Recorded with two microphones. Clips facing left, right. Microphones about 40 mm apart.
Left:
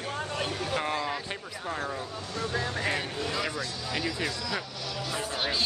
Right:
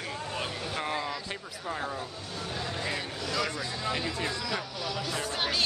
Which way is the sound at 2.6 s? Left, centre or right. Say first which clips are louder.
Left 3 dB; left.